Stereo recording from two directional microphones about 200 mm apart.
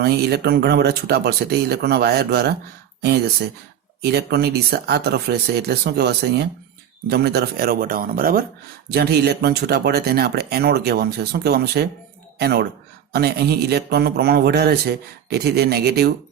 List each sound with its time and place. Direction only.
0.0 s speech: 55° right (ahead or behind)